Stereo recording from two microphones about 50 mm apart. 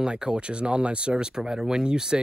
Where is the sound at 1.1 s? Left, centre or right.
Centre.